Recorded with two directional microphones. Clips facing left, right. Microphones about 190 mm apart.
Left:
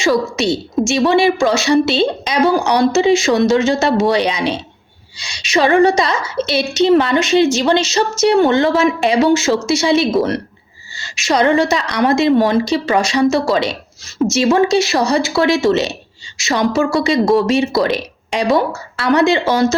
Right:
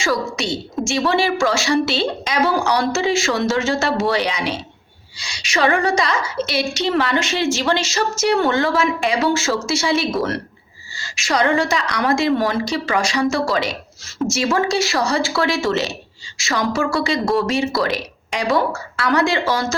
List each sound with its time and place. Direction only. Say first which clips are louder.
0.0 s a woman's voice: left 6 dB; 20° left (ahead or behind)